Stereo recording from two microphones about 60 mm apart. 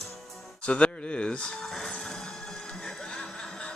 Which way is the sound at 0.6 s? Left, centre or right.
Centre.